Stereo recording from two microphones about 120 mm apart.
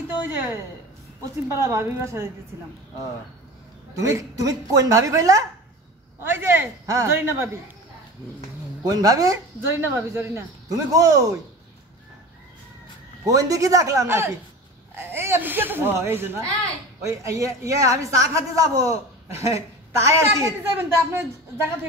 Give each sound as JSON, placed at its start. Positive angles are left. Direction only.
{"t": 1.5, "sound": "a woman's voice", "side_deg": -25}
{"t": 4.0, "sound": "a woman's voice", "side_deg": -25}
{"t": 8.9, "sound": "a woman's voice", "side_deg": -30}
{"t": 13.2, "sound": "a woman's voice", "side_deg": -30}